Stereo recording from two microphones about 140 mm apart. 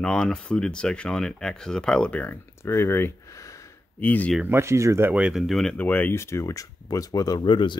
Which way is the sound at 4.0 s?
10° left (ahead or behind).